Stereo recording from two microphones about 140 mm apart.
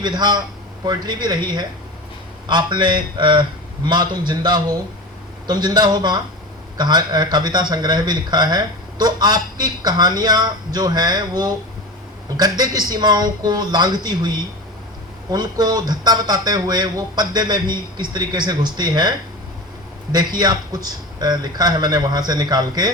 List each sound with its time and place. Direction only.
0.0 s speech: 30° right (ahead or behind)
20.1 s speech: 30° right (ahead or behind)